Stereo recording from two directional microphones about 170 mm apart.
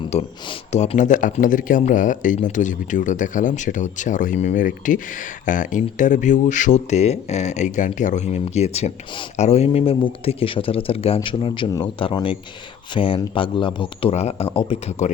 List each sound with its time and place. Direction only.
0.1 s speech: 40° left (ahead or behind)